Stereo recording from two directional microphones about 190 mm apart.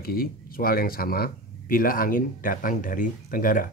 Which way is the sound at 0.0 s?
50° left (ahead or behind).